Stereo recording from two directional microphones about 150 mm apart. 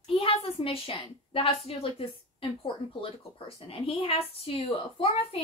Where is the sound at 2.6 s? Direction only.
40° left (ahead or behind).